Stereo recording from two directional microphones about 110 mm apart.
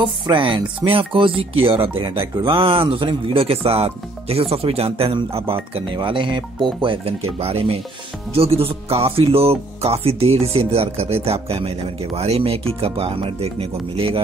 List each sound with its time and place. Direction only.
0.0 s music: 45° right (ahead or behind)
0.8 s speech: 55° right (ahead or behind)
7.1 s speech: 65° right (ahead or behind)